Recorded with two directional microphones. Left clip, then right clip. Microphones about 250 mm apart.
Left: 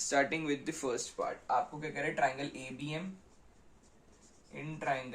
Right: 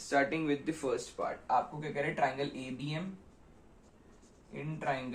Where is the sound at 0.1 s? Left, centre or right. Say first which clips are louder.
Right 2 dB; left.